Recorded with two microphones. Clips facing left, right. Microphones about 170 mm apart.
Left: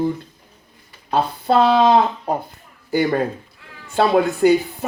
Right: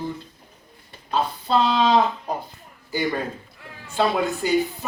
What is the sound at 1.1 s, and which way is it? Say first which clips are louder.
Speech: left 4 dB; 55° left (ahead or behind).